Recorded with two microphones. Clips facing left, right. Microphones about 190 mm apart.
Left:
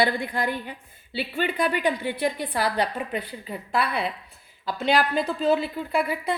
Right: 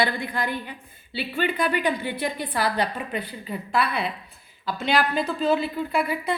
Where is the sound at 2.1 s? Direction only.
35° left (ahead or behind).